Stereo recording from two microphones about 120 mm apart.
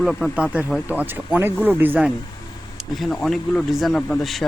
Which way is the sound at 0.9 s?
15° right (ahead or behind).